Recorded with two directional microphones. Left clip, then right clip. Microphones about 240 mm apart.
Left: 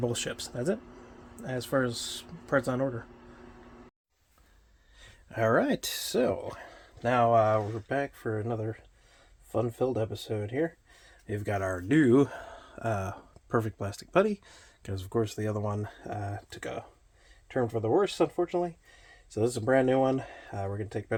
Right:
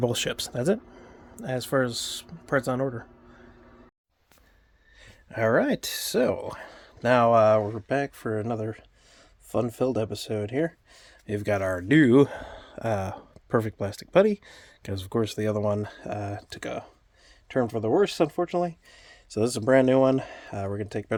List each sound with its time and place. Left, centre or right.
0.0 s speech: right
4.9 s speech: centre; by 21.2 s right